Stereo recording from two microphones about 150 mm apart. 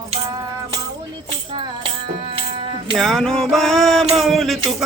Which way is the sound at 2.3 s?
35° right (ahead or behind).